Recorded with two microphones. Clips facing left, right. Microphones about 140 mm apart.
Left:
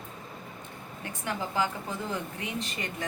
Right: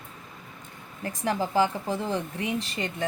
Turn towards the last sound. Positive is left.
turn(degrees=-30)  # may be behind; listen again after turning